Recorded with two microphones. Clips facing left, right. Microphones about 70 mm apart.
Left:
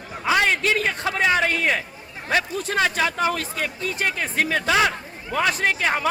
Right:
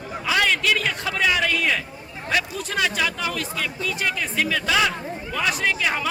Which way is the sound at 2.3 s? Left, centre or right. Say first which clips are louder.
Left 2 dB; left.